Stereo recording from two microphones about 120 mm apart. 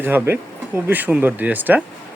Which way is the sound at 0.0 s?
15° right (ahead or behind).